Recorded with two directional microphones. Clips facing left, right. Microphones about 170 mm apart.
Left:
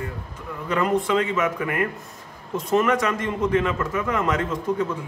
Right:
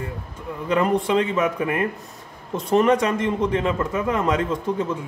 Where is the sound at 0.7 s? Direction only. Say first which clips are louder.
Right 2 dB; 30° right (ahead or behind).